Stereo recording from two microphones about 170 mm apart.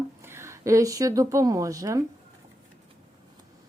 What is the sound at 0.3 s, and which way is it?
A woman's voice, 15° right (ahead or behind).